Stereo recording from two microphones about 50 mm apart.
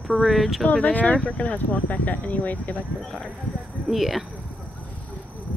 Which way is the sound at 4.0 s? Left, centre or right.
Centre.